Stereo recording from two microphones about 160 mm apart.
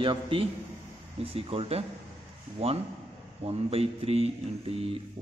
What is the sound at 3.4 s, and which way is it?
Speech, 40° right (ahead or behind).